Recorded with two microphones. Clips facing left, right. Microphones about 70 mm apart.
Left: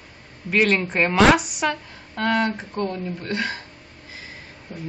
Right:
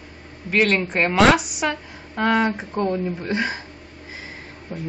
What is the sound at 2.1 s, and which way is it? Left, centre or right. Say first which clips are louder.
A woman's voice: right 2 dB; centre.